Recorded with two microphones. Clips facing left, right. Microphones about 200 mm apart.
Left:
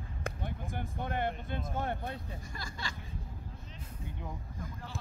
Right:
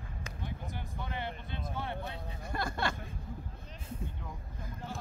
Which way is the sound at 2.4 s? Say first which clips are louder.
Right 9 dB; 60° right (ahead or behind).